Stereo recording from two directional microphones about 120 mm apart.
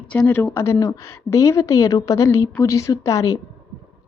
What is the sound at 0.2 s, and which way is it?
A woman's voice, 20° left (ahead or behind).